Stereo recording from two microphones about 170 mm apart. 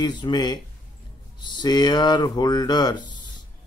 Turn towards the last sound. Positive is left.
turn(degrees=25)  # may be behind; listen again after turning